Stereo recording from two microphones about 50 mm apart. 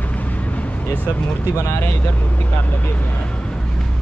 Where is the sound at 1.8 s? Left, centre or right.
Left.